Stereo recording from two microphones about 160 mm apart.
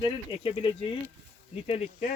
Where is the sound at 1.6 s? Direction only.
45° left (ahead or behind).